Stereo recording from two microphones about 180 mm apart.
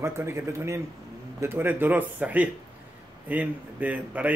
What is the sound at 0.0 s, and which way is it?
Speech, 15° right (ahead or behind).